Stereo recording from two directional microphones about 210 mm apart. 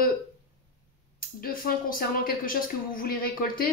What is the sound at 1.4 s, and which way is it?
Speech, 45° left (ahead or behind).